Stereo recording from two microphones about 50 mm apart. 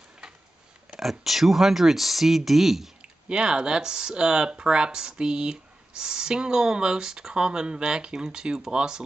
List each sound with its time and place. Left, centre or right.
0.9 s speech: centre
3.0 s speech: centre